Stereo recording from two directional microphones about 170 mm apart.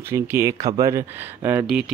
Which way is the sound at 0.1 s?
15° right (ahead or behind).